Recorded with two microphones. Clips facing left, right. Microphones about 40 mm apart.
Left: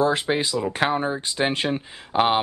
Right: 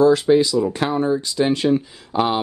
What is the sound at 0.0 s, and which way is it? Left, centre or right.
Speech, left.